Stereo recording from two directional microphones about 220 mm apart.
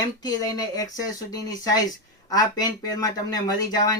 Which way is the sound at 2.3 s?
15° left (ahead or behind).